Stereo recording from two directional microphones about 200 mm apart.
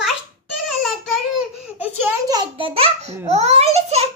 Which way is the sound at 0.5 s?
Centre (ahead or behind).